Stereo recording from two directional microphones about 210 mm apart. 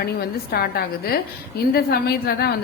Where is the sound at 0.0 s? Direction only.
50° left (ahead or behind).